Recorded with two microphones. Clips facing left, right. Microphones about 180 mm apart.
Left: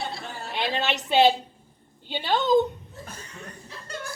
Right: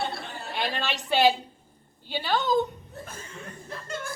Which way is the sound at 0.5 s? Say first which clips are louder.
Left 3 dB; 20° left (ahead or behind).